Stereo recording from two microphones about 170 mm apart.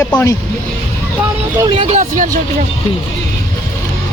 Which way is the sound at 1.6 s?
35° right (ahead or behind).